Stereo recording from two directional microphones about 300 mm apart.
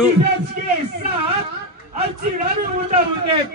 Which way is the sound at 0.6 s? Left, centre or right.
Right.